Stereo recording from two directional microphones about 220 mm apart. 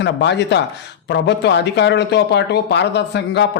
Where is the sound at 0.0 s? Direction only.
50° left (ahead or behind).